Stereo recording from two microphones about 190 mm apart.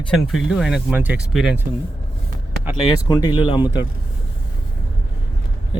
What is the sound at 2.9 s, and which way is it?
Speech, 20° left (ahead or behind).